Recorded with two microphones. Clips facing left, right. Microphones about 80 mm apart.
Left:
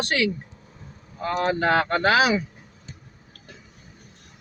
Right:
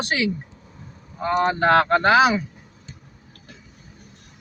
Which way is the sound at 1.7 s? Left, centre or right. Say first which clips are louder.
Right 6 dB; right.